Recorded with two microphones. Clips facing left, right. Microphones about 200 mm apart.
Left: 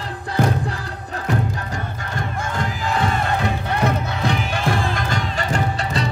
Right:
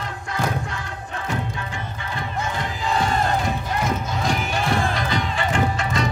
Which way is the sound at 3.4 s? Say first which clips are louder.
Left 3 dB; 60° left (ahead or behind).